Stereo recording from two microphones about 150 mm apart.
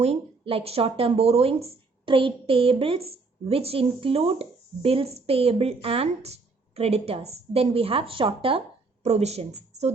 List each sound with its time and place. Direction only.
0.0 s a woman's voice: 40° right (ahead or behind)